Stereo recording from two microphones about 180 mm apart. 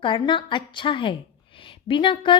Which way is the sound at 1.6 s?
30° left (ahead or behind).